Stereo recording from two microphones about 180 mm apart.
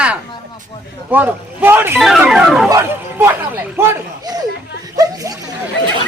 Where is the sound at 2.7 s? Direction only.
15° right (ahead or behind).